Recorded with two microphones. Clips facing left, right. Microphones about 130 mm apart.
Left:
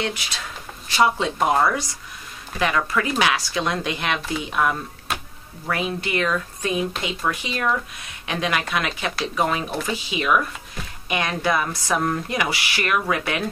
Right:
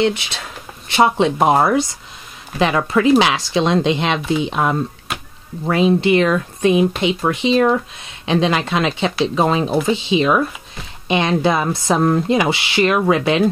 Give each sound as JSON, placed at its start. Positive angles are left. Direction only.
{"t": 0.0, "sound": "speech", "side_deg": -25}
{"t": 5.1, "sound": "a sound", "side_deg": 0}
{"t": 5.7, "sound": "speech", "side_deg": -25}